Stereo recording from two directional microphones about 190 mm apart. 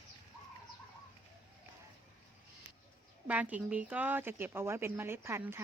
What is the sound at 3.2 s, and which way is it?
Speech, 10° right (ahead or behind).